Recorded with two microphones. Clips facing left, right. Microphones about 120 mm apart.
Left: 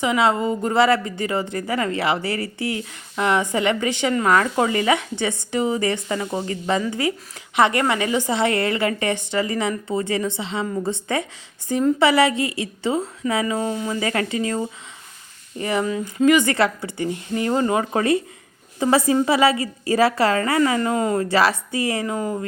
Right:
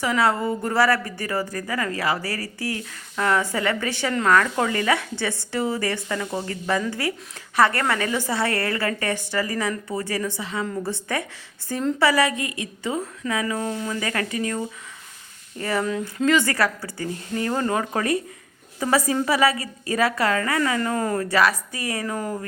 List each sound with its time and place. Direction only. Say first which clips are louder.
0.0 s a woman's voice: left 2 dB; 20° left (ahead or behind)
11.7 s a woman's voice: left 5 dB; 10° left (ahead or behind)
11.9 s speech: left 1 dB; 25° left (ahead or behind)
15.5 s a woman's voice: left 2 dB; 15° left (ahead or behind)